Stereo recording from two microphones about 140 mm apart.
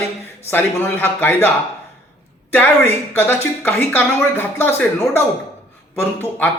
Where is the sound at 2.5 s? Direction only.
15° left (ahead or behind).